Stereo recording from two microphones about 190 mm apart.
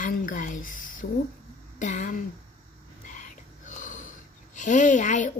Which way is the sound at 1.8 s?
40° left (ahead or behind).